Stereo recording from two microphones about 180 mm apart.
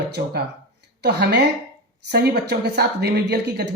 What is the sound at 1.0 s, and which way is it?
A woman's voice, 70° right (ahead or behind).